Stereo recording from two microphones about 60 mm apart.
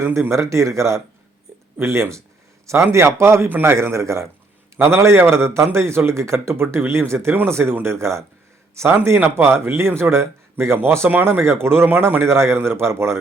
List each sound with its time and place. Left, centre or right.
0.0 s a man's voice: right
4.8 s a man's voice: right
9.2 s a man's voice: right